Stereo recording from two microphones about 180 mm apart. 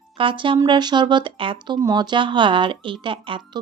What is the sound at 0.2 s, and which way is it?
Speech, 30° right (ahead or behind).